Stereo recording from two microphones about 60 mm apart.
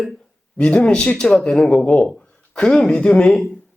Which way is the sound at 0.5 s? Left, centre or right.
Centre.